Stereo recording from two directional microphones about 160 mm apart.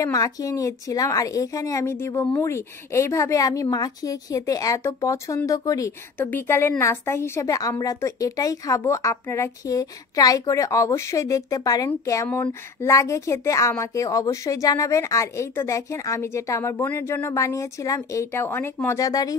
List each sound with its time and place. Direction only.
0.0 s a woman's voice: 20° left (ahead or behind)